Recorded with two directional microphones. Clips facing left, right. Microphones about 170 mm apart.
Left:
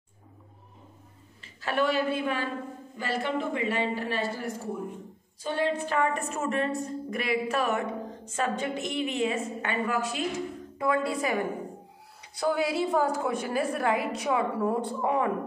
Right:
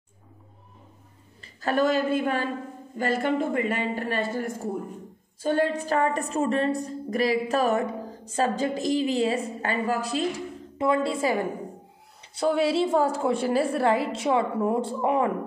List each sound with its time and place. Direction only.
1.4 s a woman's voice: 40° right (ahead or behind); by 15.2 s 25° right (ahead or behind)